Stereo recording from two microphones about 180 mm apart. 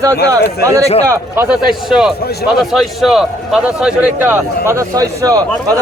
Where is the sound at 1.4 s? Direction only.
Centre (ahead or behind).